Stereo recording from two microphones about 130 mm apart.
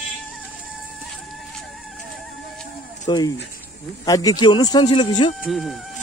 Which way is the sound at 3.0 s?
30° left (ahead or behind).